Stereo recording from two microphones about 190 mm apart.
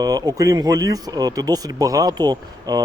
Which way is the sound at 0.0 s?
20° right (ahead or behind).